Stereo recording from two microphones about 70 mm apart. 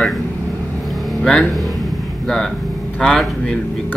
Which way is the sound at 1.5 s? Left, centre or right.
Centre.